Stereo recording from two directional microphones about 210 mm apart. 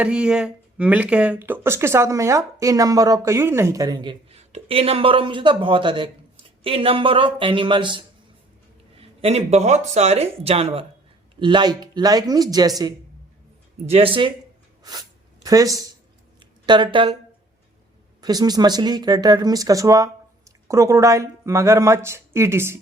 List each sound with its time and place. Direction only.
0.0 s speech: 5° right (ahead or behind)
13.8 s speech: 25° right (ahead or behind)
15.4 s speech: 15° right (ahead or behind)
18.2 s speech: 20° right (ahead or behind)